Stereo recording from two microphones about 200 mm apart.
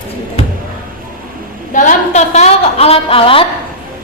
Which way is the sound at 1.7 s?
35° left (ahead or behind).